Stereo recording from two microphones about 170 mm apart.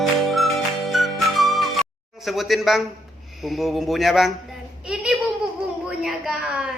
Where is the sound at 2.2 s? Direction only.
Centre (ahead or behind).